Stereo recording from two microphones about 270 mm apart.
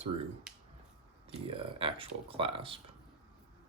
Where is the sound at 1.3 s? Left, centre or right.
Centre.